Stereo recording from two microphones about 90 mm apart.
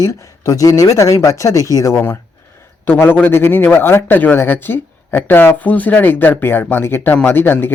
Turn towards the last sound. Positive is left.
turn(degrees=20)  # may be behind; listen again after turning